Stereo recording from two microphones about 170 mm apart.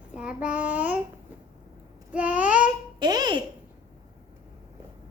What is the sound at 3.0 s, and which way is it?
Babbling, 25° right (ahead or behind).